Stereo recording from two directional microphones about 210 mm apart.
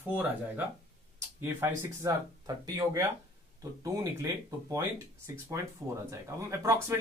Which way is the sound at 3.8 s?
15° right (ahead or behind).